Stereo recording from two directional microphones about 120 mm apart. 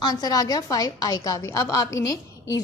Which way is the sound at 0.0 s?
30° left (ahead or behind).